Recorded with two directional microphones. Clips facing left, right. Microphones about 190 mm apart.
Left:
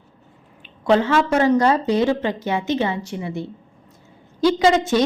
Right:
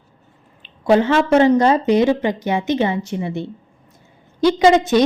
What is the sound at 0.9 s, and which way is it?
A woman's voice, 15° right (ahead or behind).